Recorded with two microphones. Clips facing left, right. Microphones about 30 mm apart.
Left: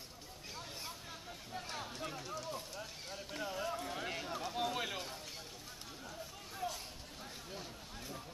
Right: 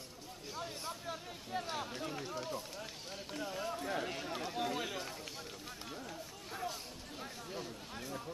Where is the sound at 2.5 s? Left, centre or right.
Centre.